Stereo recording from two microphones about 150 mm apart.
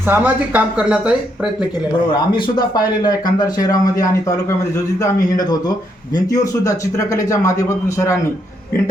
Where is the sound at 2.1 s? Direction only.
30° left (ahead or behind).